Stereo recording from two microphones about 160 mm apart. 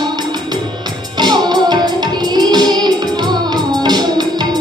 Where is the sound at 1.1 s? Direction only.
25° right (ahead or behind).